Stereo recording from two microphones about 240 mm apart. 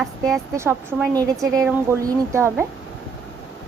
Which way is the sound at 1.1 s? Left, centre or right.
Centre.